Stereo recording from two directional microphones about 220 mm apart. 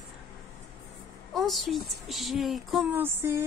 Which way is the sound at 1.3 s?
Centre (ahead or behind).